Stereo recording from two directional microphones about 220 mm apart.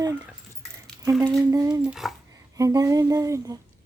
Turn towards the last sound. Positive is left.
turn(degrees=-15)  # may be behind; listen again after turning